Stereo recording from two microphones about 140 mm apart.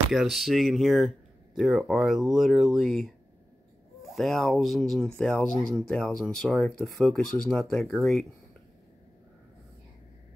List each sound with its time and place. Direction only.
0.1 s speech: centre (ahead or behind)